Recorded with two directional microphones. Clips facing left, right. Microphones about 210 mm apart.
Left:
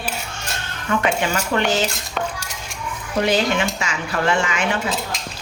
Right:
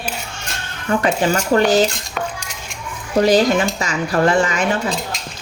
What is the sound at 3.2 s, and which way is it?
Speech, 40° right (ahead or behind).